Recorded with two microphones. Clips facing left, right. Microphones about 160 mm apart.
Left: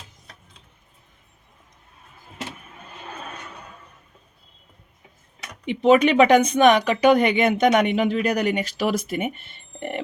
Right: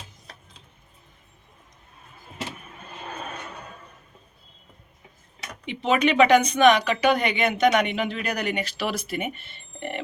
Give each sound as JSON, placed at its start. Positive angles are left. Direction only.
{"t": 5.8, "sound": "speech", "side_deg": 45}